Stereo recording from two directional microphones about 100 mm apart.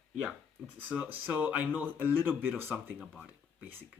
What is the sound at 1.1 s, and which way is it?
Speech, 15° right (ahead or behind).